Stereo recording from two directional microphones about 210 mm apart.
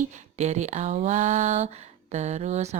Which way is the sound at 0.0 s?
35° right (ahead or behind).